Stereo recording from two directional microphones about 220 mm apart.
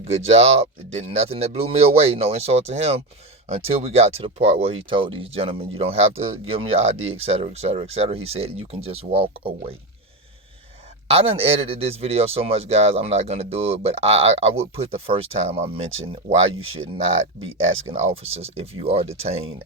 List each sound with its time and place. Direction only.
0.0 s speech: 30° right (ahead or behind)
11.1 s speech: 25° right (ahead or behind)
16.6 s speech: 65° right (ahead or behind)
17.9 s speech: 30° right (ahead or behind)